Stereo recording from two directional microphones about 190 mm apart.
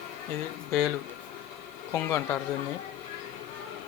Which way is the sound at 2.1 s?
10° left (ahead or behind).